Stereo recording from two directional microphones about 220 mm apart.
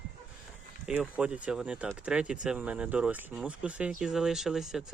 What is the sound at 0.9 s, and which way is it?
Speech, 5° right (ahead or behind).